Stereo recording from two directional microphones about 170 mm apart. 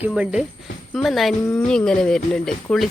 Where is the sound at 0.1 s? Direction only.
5° right (ahead or behind).